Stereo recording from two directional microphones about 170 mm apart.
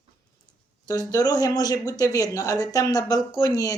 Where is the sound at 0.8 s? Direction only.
20° left (ahead or behind).